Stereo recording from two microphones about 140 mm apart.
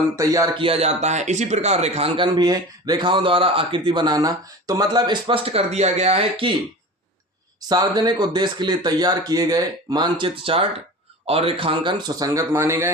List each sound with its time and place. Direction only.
0.2 s speech: 25° right (ahead or behind)
0.5 s speech: 40° right (ahead or behind)
7.7 s speech: 30° right (ahead or behind)